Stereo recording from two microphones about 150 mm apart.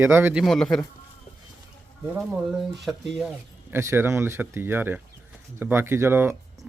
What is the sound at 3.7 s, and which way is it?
Speech, 15° right (ahead or behind).